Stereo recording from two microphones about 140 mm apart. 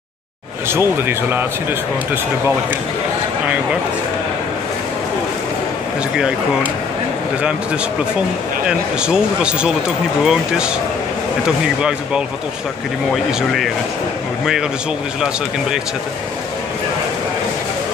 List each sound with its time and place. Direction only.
0.7 s speech: 15° right (ahead or behind)
6.1 s speech: 5° right (ahead or behind)
8.6 s speech: 5° right (ahead or behind)